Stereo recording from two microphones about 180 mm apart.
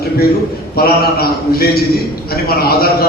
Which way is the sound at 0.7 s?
55° left (ahead or behind).